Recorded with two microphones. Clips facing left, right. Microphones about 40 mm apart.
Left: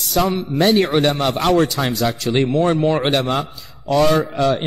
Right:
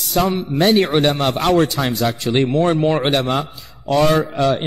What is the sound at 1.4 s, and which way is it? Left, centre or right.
Speech, right.